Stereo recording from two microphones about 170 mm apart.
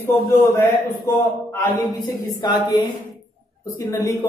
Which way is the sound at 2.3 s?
25° left (ahead or behind).